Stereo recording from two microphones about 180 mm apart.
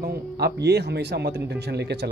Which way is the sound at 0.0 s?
65° right (ahead or behind).